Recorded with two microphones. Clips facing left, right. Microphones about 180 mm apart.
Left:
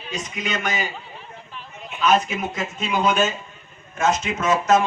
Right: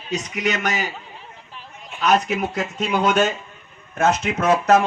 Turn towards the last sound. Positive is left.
turn(degrees=-60)  # may be behind; listen again after turning